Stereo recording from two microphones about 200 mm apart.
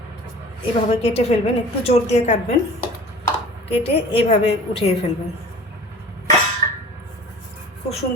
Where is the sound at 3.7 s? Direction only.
30° left (ahead or behind).